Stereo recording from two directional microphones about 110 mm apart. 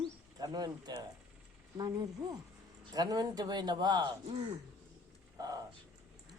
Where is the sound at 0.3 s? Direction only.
35° right (ahead or behind).